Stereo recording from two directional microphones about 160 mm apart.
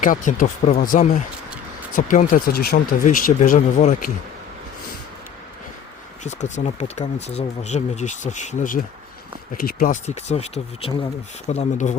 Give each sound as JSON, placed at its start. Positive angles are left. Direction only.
{"t": 0.0, "sound": "speech", "side_deg": 55}
{"t": 6.2, "sound": "speech", "side_deg": 45}